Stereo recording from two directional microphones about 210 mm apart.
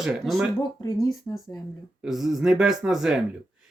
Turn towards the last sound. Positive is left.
turn(degrees=0)  # may be behind; listen again after turning